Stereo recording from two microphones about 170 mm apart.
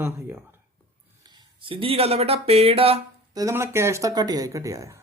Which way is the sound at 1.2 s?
25° right (ahead or behind).